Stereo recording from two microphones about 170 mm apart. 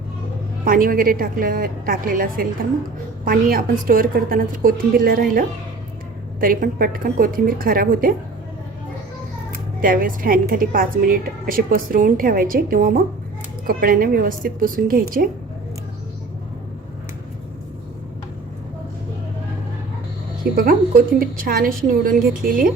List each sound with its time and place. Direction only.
0.6 s a woman's voice: 55° right (ahead or behind)
9.8 s a woman's voice: 55° right (ahead or behind)
20.4 s a woman's voice: 60° right (ahead or behind)